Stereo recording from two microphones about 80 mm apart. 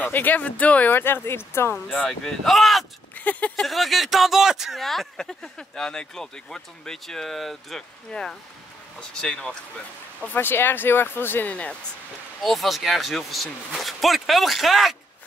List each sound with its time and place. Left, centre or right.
0.0 s speech: left
2.0 s speech: centre
3.2 s speech: centre
3.5 s speech: centre
10.2 s speech: left
12.4 s speech: centre